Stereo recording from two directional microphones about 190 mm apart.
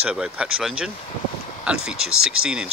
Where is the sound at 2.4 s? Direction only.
90° right.